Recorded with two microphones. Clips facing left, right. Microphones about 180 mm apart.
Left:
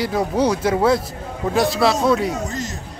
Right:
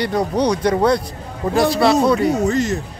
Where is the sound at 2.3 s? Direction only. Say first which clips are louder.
Right 9 dB; 65° right (ahead or behind).